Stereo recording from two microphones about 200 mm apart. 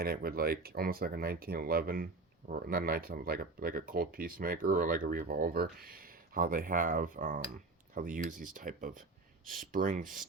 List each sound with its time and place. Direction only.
0.0 s speech: 50° right (ahead or behind)